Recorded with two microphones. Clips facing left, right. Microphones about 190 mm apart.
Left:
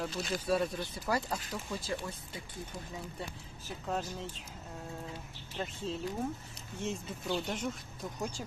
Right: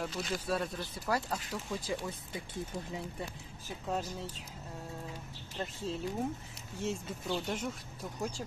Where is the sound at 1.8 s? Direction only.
15° right (ahead or behind).